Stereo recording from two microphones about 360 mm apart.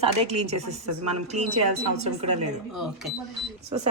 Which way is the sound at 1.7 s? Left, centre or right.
Right.